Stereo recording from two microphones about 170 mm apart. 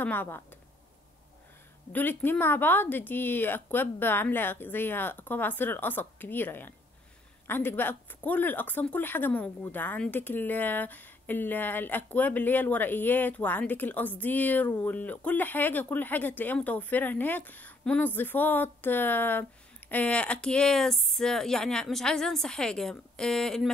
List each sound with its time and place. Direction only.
0.0 s speech: 10° left (ahead or behind)
1.9 s speech: 10° left (ahead or behind)